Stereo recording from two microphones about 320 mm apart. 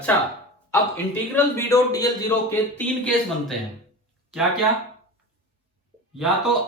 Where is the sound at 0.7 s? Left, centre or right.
Centre.